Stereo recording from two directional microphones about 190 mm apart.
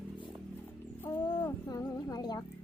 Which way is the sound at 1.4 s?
15° left (ahead or behind).